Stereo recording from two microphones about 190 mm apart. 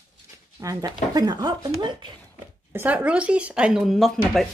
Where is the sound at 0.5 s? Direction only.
20° right (ahead or behind).